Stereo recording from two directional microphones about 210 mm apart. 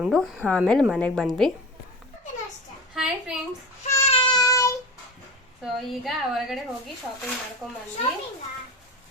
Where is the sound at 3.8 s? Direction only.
30° left (ahead or behind); by 4.7 s 15° left (ahead or behind).